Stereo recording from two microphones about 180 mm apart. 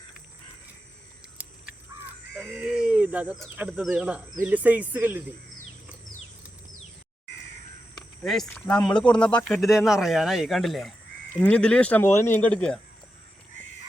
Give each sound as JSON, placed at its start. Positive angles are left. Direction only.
{"t": 1.4, "sound": "crow", "side_deg": -10}
{"t": 2.5, "sound": "speech", "side_deg": -5}
{"t": 8.2, "sound": "speech", "side_deg": 0}